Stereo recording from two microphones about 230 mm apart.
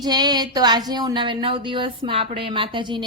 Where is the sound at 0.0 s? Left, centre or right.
Centre.